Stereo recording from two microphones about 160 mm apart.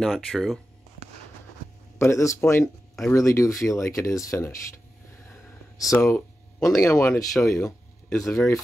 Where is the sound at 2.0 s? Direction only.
20° left (ahead or behind).